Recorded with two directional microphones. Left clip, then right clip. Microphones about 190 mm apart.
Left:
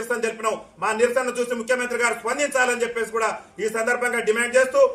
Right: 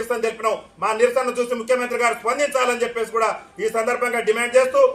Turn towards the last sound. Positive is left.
turn(degrees=0)  # may be behind; listen again after turning